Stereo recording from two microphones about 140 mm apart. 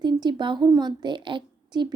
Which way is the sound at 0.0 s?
30° right (ahead or behind).